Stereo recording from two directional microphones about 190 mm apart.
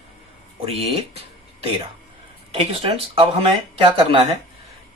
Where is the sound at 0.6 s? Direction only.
30° right (ahead or behind).